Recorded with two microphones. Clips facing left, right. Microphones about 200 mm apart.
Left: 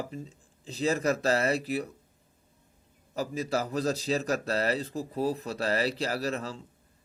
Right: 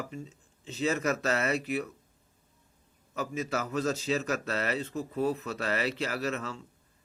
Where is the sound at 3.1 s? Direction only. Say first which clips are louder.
Left 2 dB; 35° left (ahead or behind).